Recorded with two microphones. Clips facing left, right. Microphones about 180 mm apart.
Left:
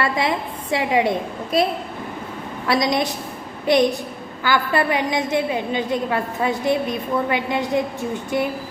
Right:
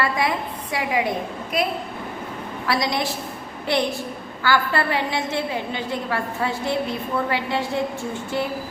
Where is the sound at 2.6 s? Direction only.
20° left (ahead or behind).